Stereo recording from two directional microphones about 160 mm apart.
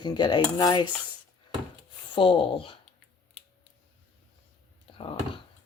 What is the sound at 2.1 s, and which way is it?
Speech, 35° left (ahead or behind).